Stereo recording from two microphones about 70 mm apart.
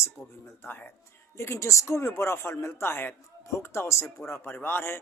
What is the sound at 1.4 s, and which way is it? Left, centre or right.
A man's voice, left.